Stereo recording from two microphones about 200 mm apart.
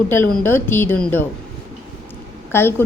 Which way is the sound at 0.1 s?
10° left (ahead or behind).